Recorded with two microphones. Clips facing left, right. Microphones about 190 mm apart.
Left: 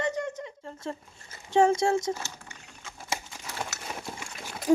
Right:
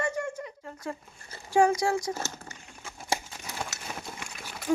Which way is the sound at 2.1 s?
45° right (ahead or behind).